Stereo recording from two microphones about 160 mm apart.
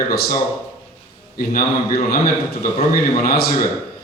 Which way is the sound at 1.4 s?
65° left (ahead or behind).